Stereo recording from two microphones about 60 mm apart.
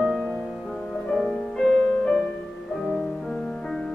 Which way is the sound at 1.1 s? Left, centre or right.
Centre.